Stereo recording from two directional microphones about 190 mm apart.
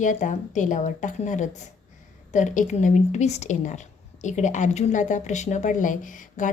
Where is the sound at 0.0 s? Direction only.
40° left (ahead or behind).